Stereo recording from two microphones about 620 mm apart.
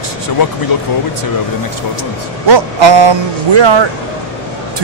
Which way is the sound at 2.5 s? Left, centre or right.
Right.